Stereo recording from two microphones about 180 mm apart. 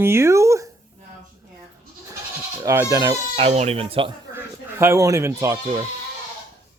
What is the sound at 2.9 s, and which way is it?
Speech, 20° right (ahead or behind).